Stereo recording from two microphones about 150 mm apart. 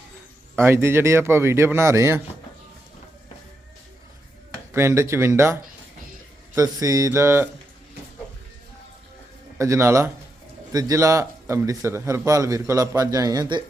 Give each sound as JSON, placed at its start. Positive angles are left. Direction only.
{"t": 0.5, "sound": "speech", "side_deg": -15}
{"t": 4.7, "sound": "speech", "side_deg": -20}
{"t": 6.6, "sound": "a man's voice", "side_deg": -20}
{"t": 9.6, "sound": "a man's voice", "side_deg": -20}